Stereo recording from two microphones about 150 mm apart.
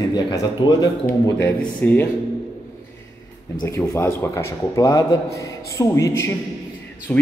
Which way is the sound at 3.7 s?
15° left (ahead or behind).